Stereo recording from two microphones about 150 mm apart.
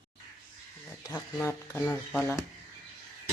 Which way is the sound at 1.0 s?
15° left (ahead or behind).